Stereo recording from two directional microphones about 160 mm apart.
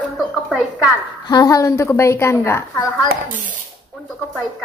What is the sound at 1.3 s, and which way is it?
A woman's voice, 20° left (ahead or behind).